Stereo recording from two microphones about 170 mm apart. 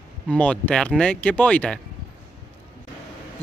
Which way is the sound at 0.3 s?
10° left (ahead or behind).